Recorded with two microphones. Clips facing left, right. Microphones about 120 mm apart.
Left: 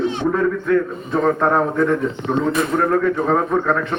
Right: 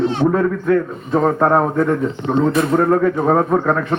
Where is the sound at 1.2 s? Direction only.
25° right (ahead or behind).